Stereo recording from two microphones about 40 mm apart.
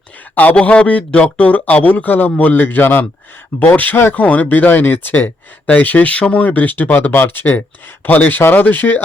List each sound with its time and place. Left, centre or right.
0.6 s a man's voice: left
2.4 s a man's voice: left
3.7 s speech: left